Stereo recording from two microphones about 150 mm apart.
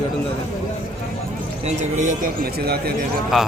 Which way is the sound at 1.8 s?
55° right (ahead or behind).